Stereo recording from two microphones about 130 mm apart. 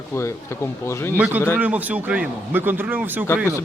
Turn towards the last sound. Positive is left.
turn(degrees=-15)  # may be behind; listen again after turning